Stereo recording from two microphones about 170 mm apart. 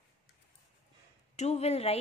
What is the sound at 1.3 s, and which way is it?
Speech, 40° left (ahead or behind).